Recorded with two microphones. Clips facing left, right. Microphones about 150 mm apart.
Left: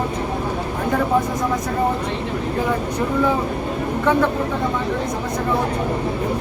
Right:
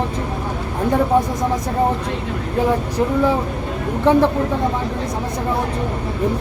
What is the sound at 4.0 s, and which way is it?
Speech, 30° right (ahead or behind).